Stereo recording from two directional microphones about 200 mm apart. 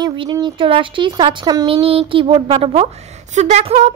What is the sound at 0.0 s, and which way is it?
Speech, 20° right (ahead or behind).